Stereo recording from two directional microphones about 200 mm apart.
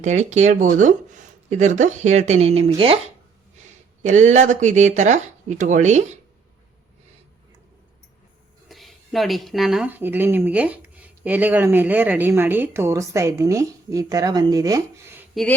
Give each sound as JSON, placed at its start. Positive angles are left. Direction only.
{"t": 0.0, "sound": "speech", "side_deg": -35}
{"t": 8.7, "sound": "speech", "side_deg": 0}